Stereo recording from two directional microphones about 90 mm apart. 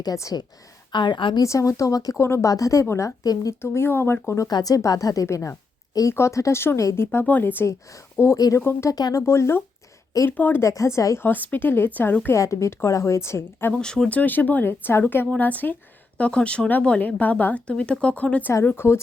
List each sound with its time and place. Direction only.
0.0 s a woman's voice: 40° left (ahead or behind)
0.9 s a woman's voice: 60° left (ahead or behind)
1.4 s a woman's voice: 35° left (ahead or behind)
2.1 s a woman's voice: 30° left (ahead or behind)
4.4 s a woman's voice: 45° left (ahead or behind); by 7.8 s 25° left (ahead or behind)
8.4 s speech: 40° left (ahead or behind)
9.2 s speech: 30° left (ahead or behind)
10.6 s a woman's voice: 35° left (ahead or behind)
11.3 s speech: 20° left (ahead or behind)
12.4 s a woman's voice: 35° left (ahead or behind)
13.7 s speech: 10° left (ahead or behind); by 18.9 s 25° left (ahead or behind)